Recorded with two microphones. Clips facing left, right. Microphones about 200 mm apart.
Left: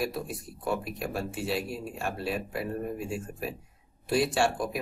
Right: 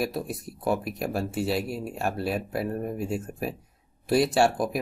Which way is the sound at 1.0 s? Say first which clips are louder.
Right 4 dB; 40° right (ahead or behind).